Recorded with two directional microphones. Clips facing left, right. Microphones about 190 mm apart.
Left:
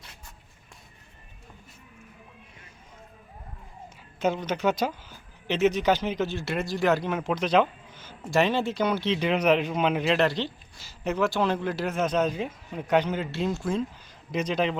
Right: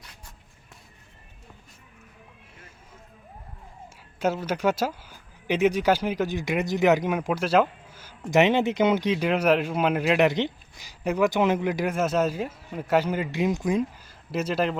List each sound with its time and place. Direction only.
4.2 s speech: 10° right (ahead or behind)
8.3 s speech: 20° right (ahead or behind)
9.0 s speech: 10° right (ahead or behind)
10.2 s speech: 20° right (ahead or behind)
14.3 s speech: 5° right (ahead or behind)